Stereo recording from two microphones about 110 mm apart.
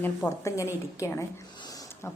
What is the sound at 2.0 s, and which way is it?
Music, 20° left (ahead or behind).